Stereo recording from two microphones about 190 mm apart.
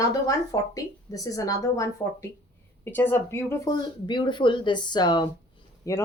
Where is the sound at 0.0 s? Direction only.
20° left (ahead or behind).